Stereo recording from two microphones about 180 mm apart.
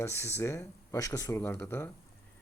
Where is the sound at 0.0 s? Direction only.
15° left (ahead or behind).